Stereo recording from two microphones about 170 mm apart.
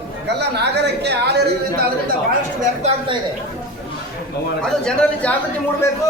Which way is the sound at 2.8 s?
40° right (ahead or behind).